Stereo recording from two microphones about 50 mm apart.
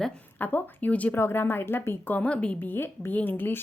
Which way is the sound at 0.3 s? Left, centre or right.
Left.